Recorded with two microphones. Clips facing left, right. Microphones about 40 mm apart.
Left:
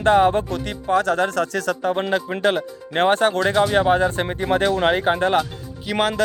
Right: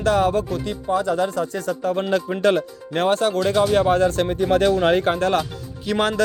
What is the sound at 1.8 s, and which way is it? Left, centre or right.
Speech, left.